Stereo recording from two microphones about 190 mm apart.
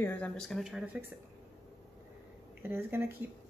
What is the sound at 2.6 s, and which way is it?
Speech, 10° right (ahead or behind).